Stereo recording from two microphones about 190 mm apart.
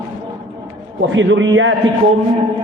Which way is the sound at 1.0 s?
75° right (ahead or behind).